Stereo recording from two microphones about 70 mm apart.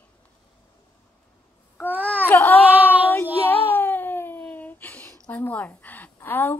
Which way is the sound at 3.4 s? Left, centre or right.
Left.